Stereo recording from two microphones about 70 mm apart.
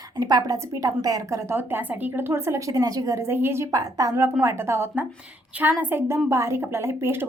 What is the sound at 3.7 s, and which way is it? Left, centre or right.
Speech, right.